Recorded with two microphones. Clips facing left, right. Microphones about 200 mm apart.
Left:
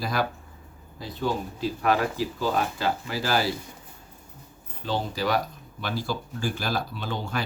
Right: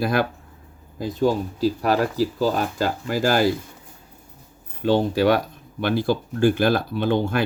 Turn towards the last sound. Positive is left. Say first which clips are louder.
# right 10 dB
turn(degrees=-55)  # may be behind; listen again after turning